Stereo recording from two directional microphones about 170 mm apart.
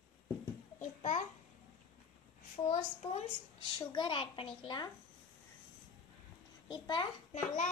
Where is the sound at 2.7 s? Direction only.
40° left (ahead or behind).